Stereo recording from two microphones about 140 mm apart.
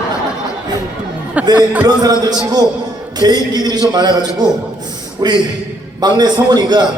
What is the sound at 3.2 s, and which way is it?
A man's voice, 30° right (ahead or behind).